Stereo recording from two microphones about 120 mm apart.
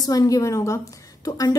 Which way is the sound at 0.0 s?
30° left (ahead or behind).